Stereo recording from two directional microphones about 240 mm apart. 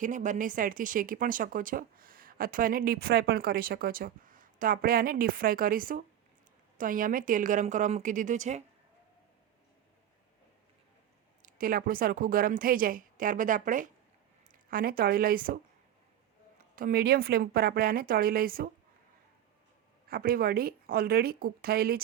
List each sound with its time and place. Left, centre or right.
0.0 s speech: right
11.4 s speech: right
16.7 s speech: right
20.1 s speech: right